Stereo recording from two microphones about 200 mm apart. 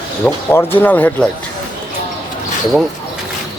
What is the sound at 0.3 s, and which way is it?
Speech, 10° left (ahead or behind).